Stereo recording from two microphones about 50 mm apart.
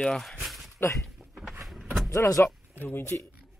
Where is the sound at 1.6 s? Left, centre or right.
Centre.